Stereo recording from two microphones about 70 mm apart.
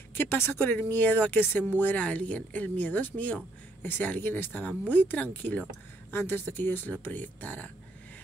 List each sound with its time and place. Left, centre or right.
0.1 s speech: left
6.1 s speech: left